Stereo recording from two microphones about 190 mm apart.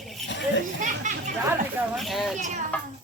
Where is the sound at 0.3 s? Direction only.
70° left (ahead or behind).